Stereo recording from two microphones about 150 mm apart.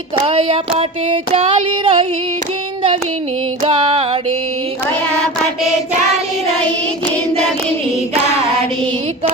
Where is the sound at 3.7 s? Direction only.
40° right (ahead or behind).